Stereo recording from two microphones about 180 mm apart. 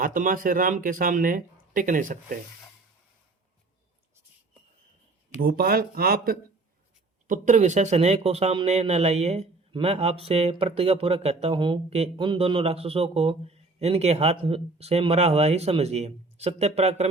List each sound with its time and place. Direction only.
0.0 s speech: 50° right (ahead or behind)
5.4 s speech: 55° right (ahead or behind)
7.3 s speech: 45° right (ahead or behind)